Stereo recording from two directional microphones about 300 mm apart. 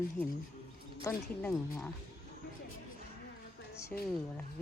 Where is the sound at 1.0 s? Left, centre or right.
Centre.